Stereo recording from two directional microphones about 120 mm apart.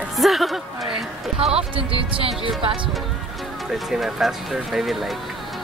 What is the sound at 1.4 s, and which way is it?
Speech, 55° right (ahead or behind).